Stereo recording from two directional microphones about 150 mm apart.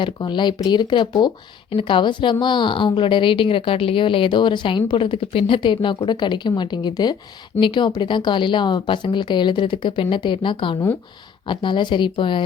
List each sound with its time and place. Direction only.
0.0 s speech: 30° left (ahead or behind)